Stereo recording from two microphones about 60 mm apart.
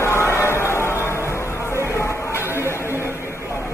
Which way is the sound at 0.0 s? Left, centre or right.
Left.